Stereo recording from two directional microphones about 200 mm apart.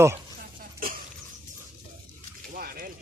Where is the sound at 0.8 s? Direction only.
45° right (ahead or behind).